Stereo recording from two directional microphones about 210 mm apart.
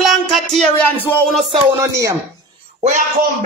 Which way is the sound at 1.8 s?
15° right (ahead or behind).